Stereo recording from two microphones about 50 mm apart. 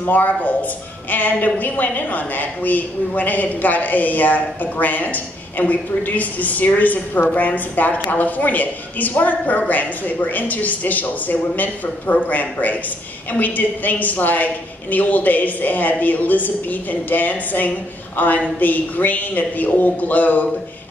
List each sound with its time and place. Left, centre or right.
0.0 s a woman's voice: left